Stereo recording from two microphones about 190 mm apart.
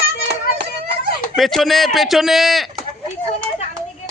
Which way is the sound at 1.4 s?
Centre (ahead or behind).